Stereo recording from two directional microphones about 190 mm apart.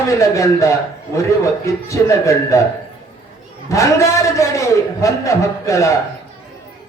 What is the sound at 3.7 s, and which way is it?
A man's voice, 15° left (ahead or behind).